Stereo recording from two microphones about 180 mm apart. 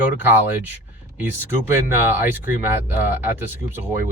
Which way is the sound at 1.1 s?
10° right (ahead or behind).